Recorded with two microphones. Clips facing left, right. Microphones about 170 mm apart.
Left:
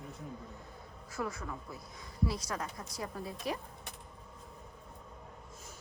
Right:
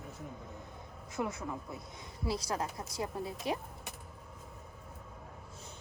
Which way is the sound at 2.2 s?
30° right (ahead or behind).